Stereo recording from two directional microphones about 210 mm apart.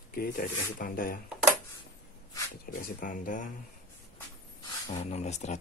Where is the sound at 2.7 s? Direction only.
40° left (ahead or behind).